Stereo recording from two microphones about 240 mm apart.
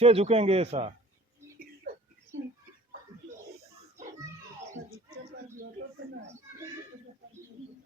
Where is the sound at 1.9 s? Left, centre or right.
Right.